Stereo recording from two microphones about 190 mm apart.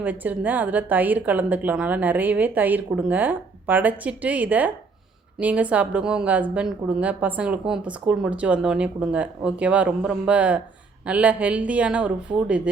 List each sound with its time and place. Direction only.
0.0 s a woman's voice: 10° right (ahead or behind)